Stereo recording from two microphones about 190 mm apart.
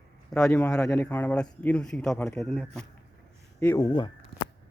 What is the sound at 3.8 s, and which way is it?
Speech, 20° left (ahead or behind).